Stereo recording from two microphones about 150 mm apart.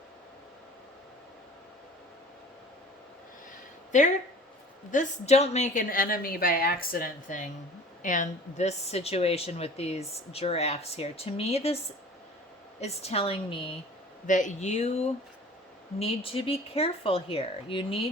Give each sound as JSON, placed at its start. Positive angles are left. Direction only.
{"t": 3.9, "sound": "a woman's voice", "side_deg": 55}
{"t": 12.8, "sound": "speech", "side_deg": 45}
{"t": 14.3, "sound": "speech", "side_deg": 55}